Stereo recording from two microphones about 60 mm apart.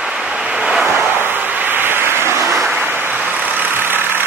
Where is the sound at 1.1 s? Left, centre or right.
Right.